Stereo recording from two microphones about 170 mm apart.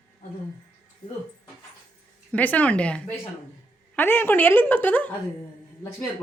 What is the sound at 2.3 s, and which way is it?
A woman's voice, 10° left (ahead or behind).